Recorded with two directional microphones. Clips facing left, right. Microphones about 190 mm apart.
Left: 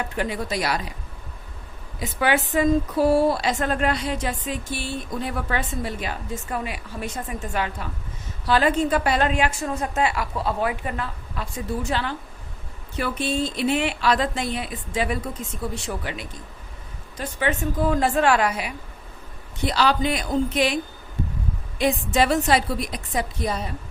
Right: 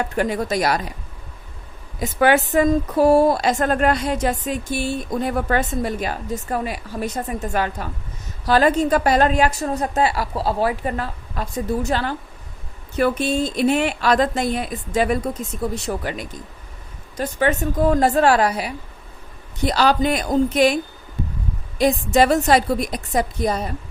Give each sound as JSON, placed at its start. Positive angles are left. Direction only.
{"t": 0.0, "sound": "a woman's voice", "side_deg": -45}
{"t": 2.0, "sound": "a woman's voice", "side_deg": -45}
{"t": 21.8, "sound": "a woman's voice", "side_deg": -40}